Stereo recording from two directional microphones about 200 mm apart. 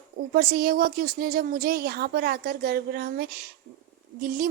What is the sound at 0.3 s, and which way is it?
A woman's voice, 50° right (ahead or behind).